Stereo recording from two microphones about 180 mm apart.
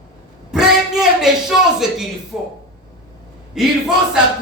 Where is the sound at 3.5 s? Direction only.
5° right (ahead or behind).